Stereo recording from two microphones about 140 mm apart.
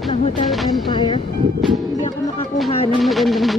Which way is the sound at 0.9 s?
40° left (ahead or behind).